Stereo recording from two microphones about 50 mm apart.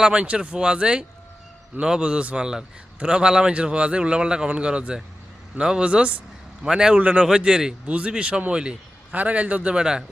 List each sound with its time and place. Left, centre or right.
0.0 s a man's voice: centre
6.7 s a man's voice: centre
7.9 s a man's voice: right